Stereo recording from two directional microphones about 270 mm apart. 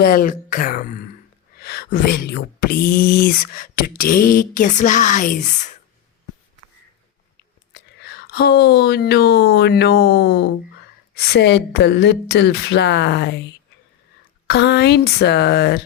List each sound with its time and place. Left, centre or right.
0.0 s speech: left
7.7 s speech: left
14.4 s speech: left